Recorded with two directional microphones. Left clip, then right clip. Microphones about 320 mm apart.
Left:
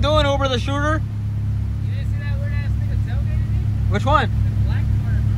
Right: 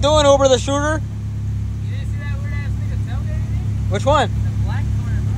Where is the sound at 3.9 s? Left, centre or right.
Centre.